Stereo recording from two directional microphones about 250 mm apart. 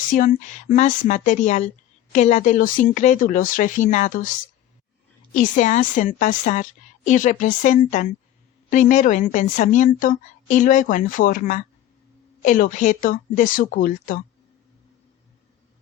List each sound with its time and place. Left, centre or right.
0.1 s a woman's voice: left
5.3 s a woman's voice: left